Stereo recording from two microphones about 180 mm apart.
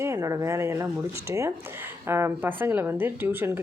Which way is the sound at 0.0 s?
15° right (ahead or behind).